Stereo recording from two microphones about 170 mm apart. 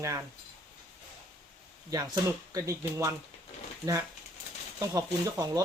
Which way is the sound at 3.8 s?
10° right (ahead or behind).